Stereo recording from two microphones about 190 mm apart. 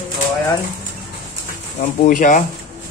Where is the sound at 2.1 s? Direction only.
45° left (ahead or behind).